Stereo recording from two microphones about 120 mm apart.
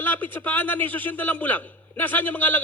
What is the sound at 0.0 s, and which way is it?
A man's voice, 15° left (ahead or behind).